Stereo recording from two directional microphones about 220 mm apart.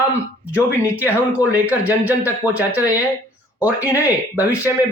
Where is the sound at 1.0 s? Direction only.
5° right (ahead or behind).